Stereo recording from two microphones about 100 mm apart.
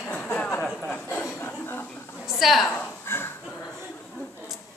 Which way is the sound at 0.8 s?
15° left (ahead or behind).